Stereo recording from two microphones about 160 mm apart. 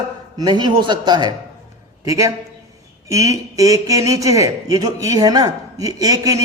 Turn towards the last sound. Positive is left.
turn(degrees=-20)  # may be behind; listen again after turning